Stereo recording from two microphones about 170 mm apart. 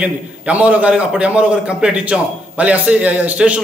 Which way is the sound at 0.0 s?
10° right (ahead or behind).